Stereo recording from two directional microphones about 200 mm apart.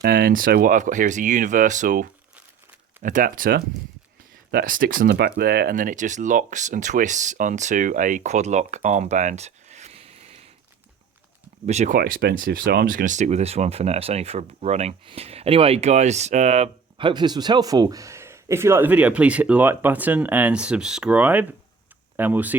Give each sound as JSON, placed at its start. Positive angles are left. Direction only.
{"t": 0.0, "sound": "speech", "side_deg": -50}
{"t": 11.6, "sound": "speech", "side_deg": -35}
{"t": 11.9, "sound": "speech", "side_deg": -45}